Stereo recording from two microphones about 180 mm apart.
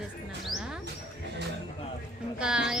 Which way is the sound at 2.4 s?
5° right (ahead or behind).